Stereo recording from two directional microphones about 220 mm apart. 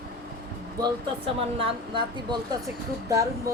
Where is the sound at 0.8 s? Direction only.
25° right (ahead or behind).